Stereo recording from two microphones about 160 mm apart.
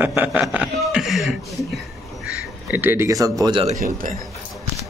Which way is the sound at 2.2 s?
10° right (ahead or behind).